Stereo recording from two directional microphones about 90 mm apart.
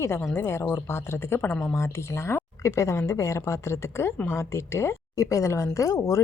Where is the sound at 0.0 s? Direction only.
30° left (ahead or behind).